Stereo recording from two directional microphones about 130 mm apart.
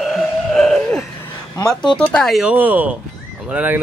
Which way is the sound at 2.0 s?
5° left (ahead or behind).